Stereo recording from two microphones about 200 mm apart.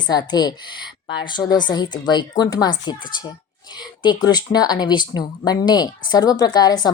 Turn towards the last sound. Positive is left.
turn(degrees=20)  # may be behind; listen again after turning